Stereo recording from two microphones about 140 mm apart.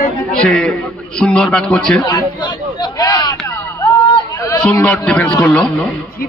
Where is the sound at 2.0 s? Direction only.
30° left (ahead or behind).